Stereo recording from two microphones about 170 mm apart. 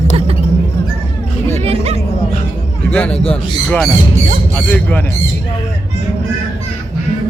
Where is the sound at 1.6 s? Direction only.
35° right (ahead or behind).